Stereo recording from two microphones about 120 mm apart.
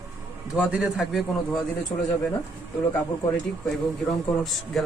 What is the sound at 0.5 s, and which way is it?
Speech, 10° right (ahead or behind).